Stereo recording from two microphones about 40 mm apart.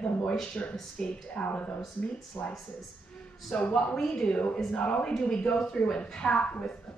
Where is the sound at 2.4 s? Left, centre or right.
Left.